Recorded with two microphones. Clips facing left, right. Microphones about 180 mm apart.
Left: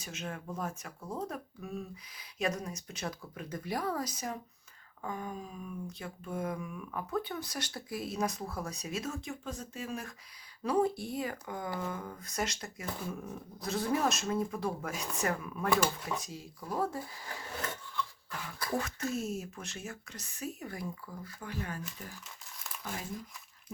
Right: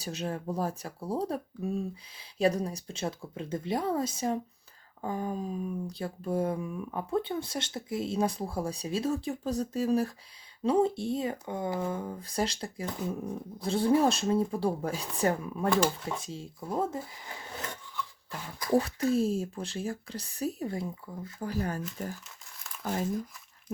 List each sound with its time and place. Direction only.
0.0 s speech: 35° right (ahead or behind)
10.6 s speech: 25° right (ahead or behind)
18.7 s speech: 35° right (ahead or behind)
21.4 s speech: 40° right (ahead or behind)